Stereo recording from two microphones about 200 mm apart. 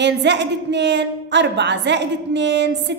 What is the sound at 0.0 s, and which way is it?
A woman's voice, 60° right (ahead or behind).